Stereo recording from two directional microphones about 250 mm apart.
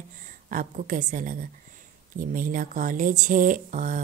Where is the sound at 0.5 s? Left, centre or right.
Right.